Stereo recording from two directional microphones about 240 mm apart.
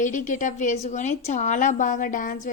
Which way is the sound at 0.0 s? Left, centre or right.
Left.